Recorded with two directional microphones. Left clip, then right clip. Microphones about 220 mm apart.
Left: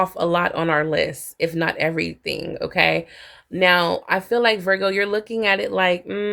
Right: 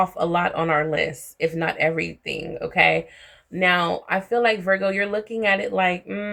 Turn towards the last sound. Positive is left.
turn(degrees=45)  # may be behind; listen again after turning